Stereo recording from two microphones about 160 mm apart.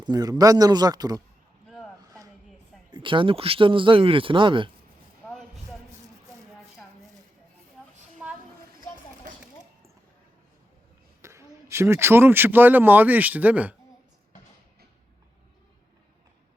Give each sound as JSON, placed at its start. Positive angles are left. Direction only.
{"t": 0.0, "sound": "a man's voice", "side_deg": -25}
{"t": 2.0, "sound": "a sound", "side_deg": -25}
{"t": 2.9, "sound": "speech", "side_deg": -30}
{"t": 11.2, "sound": "speech", "side_deg": -15}